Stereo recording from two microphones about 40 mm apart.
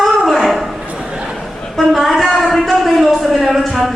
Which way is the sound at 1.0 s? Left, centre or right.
Right.